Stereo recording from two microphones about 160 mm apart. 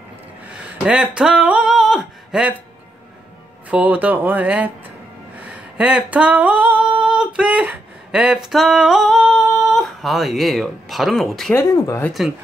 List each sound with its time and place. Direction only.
0.5 s a sound: 5° right (ahead or behind)
3.6 s speech: 10° right (ahead or behind)
5.4 s singing: 10° right (ahead or behind)
11.5 s speech: 15° left (ahead or behind)
12.1 s speech: centre (ahead or behind)